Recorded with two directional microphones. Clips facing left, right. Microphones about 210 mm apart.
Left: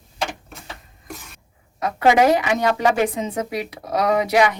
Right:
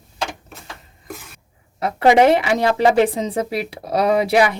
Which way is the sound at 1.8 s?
30° right (ahead or behind).